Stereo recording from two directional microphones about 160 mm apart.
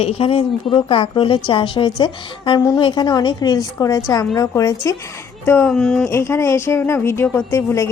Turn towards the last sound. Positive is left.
turn(degrees=20)  # may be behind; listen again after turning